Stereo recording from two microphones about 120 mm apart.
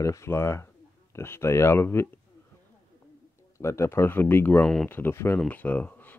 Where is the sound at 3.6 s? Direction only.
25° left (ahead or behind).